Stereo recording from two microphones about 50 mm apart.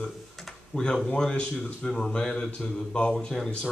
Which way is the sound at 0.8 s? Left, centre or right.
Centre.